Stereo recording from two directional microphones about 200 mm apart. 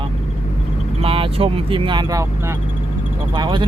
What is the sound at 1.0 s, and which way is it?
Speech, 25° right (ahead or behind).